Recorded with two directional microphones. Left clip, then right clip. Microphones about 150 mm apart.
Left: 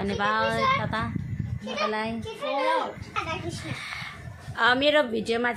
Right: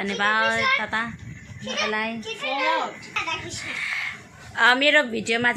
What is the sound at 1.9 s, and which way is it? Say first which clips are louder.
Speech: right 3 dB; 20° right (ahead or behind).